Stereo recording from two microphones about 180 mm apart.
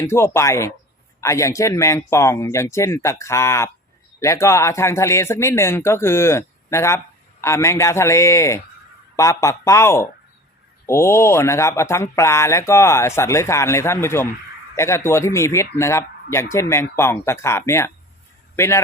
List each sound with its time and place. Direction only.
0.0 s speech: 15° left (ahead or behind)